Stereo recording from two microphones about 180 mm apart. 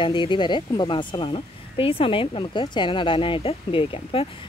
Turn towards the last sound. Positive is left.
turn(degrees=30)  # may be behind; listen again after turning